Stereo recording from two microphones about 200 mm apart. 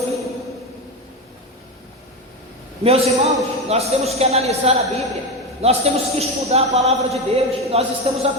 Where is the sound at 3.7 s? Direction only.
30° right (ahead or behind).